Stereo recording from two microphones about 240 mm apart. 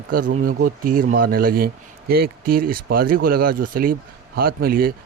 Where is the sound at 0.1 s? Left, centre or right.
Right.